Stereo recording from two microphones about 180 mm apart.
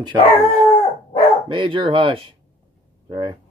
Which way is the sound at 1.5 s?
25° right (ahead or behind).